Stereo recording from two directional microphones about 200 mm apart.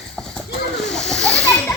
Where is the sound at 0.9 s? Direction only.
5° left (ahead or behind).